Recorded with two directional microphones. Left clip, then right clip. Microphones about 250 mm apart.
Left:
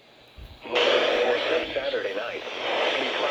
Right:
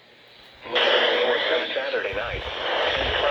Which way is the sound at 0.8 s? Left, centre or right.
Centre.